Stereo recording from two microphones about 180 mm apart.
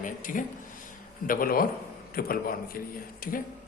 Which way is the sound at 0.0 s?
50° left (ahead or behind).